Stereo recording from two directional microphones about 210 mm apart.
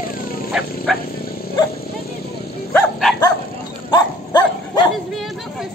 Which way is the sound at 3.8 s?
20° left (ahead or behind).